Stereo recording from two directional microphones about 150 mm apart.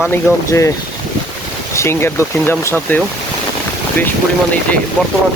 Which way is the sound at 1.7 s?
15° left (ahead or behind).